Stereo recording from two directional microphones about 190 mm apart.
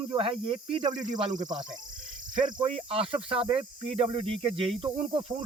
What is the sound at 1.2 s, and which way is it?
Speech, 35° right (ahead or behind).